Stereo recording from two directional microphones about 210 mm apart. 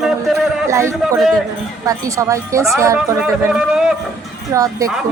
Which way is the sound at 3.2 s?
5° right (ahead or behind).